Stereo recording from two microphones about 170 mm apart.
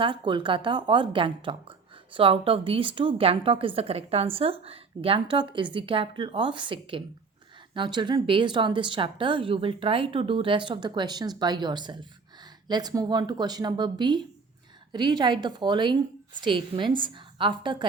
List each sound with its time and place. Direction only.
0.0 s a woman's voice: 30° right (ahead or behind)